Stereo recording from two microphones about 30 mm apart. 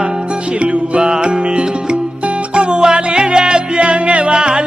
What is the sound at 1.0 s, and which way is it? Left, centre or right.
Music, right.